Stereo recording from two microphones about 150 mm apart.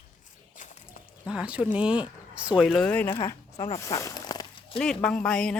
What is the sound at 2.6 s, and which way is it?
Speech, 5° left (ahead or behind).